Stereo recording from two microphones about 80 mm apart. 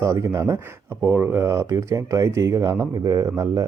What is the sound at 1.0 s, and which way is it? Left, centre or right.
Speech, right.